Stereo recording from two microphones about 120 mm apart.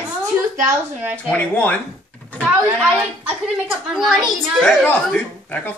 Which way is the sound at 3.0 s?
10° right (ahead or behind).